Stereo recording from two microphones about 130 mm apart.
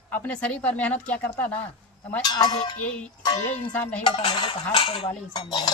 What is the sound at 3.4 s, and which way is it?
Speech, 15° left (ahead or behind).